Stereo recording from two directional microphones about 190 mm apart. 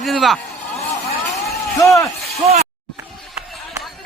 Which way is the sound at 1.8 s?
15° left (ahead or behind).